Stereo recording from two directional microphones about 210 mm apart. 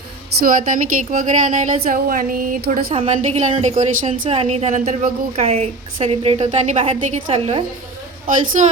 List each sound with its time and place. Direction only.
0.4 s a woman's voice: 40° right (ahead or behind)
2.9 s a woman's voice: 30° right (ahead or behind)